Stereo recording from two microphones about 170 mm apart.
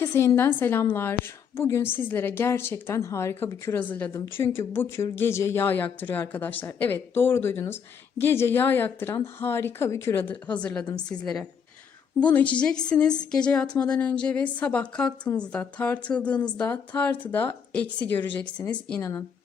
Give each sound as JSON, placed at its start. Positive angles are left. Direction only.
{"t": 0.0, "sound": "a woman's voice", "side_deg": 15}
{"t": 12.2, "sound": "a woman's voice", "side_deg": 10}